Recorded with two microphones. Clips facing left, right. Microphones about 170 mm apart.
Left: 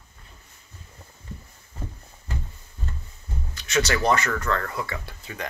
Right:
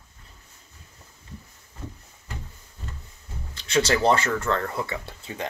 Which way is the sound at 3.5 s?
30° right (ahead or behind).